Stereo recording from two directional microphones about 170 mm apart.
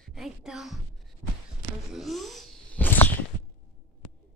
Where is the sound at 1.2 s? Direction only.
20° right (ahead or behind).